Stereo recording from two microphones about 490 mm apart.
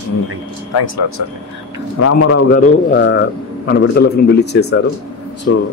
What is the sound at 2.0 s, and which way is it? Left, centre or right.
Speech, left.